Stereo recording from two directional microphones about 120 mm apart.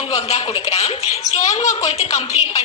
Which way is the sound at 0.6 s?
60° left (ahead or behind).